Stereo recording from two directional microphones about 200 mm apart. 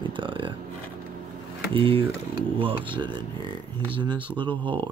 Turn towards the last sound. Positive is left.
turn(degrees=-25)  # may be behind; listen again after turning